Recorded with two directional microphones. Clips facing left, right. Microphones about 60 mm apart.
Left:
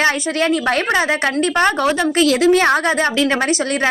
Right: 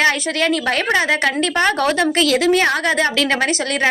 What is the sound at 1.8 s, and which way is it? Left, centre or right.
Speech, centre.